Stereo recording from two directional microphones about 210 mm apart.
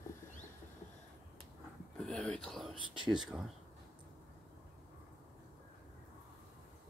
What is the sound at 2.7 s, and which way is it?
Speech, 20° right (ahead or behind).